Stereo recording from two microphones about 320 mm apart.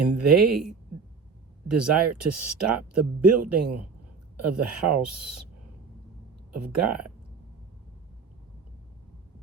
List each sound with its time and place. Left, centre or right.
0.2 s speech: right
1.6 s speech: right
6.5 s speech: right